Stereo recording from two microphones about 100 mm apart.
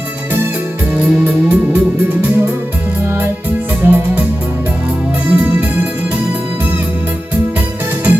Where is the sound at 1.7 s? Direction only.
20° right (ahead or behind).